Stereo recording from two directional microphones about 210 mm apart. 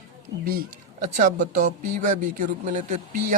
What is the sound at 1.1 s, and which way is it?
Speech, 35° right (ahead or behind).